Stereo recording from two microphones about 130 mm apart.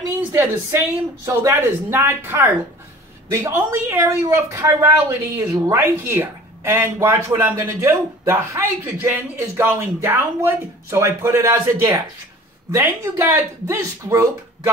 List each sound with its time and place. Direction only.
0.3 s speech: 20° right (ahead or behind)